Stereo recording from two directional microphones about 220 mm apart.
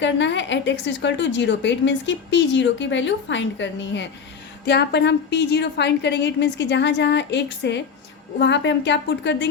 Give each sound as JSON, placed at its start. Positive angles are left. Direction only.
{"t": 0.0, "sound": "a woman's voice", "side_deg": 55}